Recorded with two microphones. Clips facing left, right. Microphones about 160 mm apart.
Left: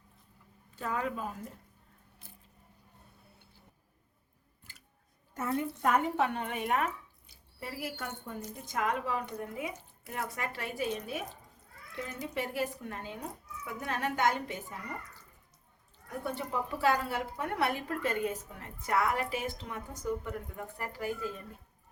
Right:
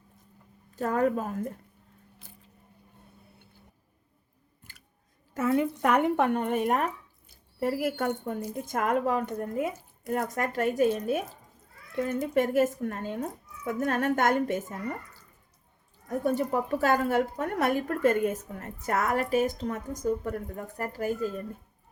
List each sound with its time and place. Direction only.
0.8 s a woman's voice: 45° right (ahead or behind)
4.6 s scissors: 50° right (ahead or behind)
5.3 s speech: 90° right; by 8.4 s 60° right (ahead or behind)
8.5 s a woman's voice: 50° right (ahead or behind)
16.0 s a woman's voice: 45° right (ahead or behind)